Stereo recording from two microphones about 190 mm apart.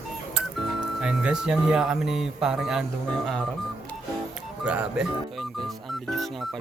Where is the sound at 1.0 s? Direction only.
5° right (ahead or behind).